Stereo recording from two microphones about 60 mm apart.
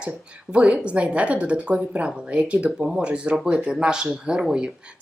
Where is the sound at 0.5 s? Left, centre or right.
Centre.